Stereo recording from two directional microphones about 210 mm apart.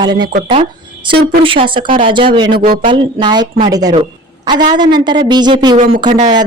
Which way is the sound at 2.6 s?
45° right (ahead or behind).